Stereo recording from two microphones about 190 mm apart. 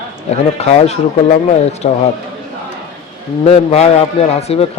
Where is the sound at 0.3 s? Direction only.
35° left (ahead or behind).